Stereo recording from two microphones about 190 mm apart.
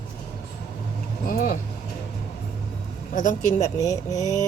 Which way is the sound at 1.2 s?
50° left (ahead or behind).